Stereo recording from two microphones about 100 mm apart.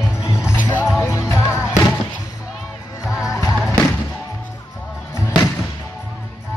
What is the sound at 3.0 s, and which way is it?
Music, 5° right (ahead or behind).